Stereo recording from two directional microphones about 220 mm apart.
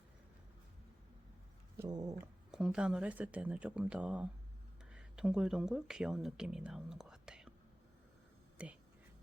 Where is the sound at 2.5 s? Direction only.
5° right (ahead or behind).